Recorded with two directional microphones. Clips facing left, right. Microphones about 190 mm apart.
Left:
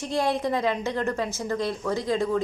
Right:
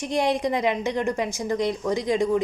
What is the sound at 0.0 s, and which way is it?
A woman's voice, 15° right (ahead or behind).